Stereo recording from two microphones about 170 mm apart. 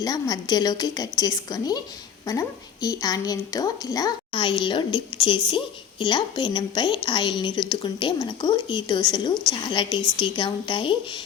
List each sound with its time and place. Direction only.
0.0 s a woman's voice: 20° left (ahead or behind)